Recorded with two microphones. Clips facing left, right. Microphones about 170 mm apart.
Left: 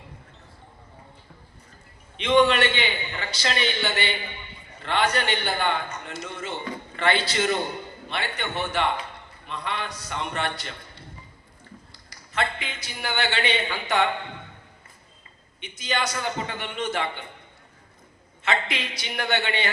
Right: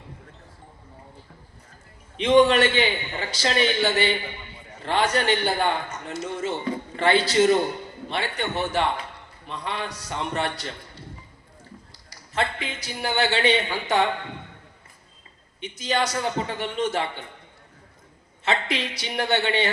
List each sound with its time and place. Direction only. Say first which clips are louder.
2.1 s a man's voice: right 3 dB; 40° right (ahead or behind)
12.3 s a man's voice: right 1 dB; 35° right (ahead or behind)
15.6 s a man's voice: right 3 dB; 35° right (ahead or behind)
18.4 s a man's voice: right 2 dB; 35° right (ahead or behind)